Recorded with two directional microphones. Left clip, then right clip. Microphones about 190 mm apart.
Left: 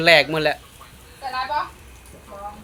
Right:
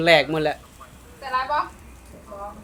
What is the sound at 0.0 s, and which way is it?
Speech, centre (ahead or behind).